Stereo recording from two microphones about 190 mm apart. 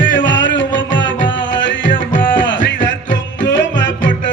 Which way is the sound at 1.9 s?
25° left (ahead or behind).